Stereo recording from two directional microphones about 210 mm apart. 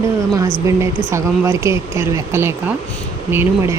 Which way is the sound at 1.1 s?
15° right (ahead or behind).